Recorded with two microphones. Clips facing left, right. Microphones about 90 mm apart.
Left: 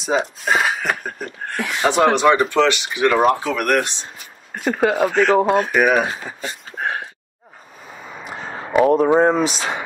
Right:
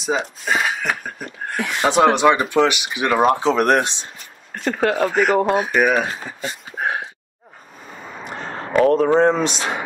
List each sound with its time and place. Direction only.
0.0 s speech: centre (ahead or behind)
1.9 s speech: 15° right (ahead or behind)
4.6 s speech: 5° left (ahead or behind)
5.1 s speech: 10° right (ahead or behind)
5.7 s speech: 5° left (ahead or behind)
8.2 s speech: 5° left (ahead or behind)